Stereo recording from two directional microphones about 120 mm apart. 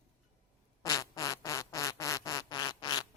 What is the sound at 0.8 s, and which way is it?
Fart, 30° left (ahead or behind).